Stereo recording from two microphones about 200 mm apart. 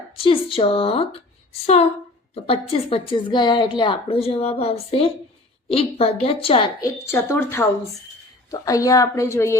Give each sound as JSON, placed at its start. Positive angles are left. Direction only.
{"t": 0.2, "sound": "a woman's voice", "side_deg": 25}
{"t": 7.0, "sound": "a woman's voice", "side_deg": 15}